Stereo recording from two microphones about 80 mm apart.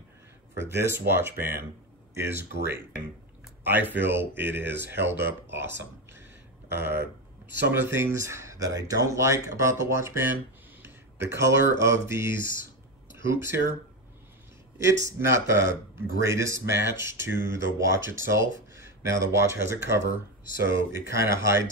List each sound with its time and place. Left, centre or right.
0.7 s speech: right
7.7 s speech: right
14.9 s speech: right